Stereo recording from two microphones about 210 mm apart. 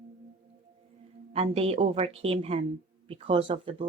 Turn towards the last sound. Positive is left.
turn(degrees=-25)  # may be behind; listen again after turning